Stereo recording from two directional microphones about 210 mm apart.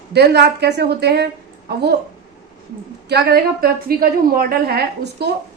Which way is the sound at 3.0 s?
50° right (ahead or behind).